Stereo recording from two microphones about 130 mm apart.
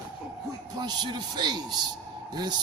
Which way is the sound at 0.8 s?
35° right (ahead or behind).